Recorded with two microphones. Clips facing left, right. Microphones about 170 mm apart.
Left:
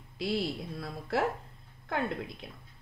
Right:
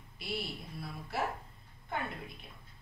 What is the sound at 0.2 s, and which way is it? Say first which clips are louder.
A woman's voice: left 8 dB; 90° left.